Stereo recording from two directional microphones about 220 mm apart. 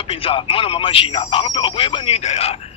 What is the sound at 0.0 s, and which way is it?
Speech, 25° left (ahead or behind).